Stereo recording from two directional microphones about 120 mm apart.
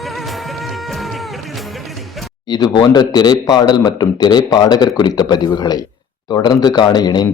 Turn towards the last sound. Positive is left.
turn(degrees=30)  # may be behind; listen again after turning